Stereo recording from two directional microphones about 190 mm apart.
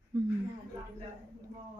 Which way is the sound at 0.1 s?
15° right (ahead or behind).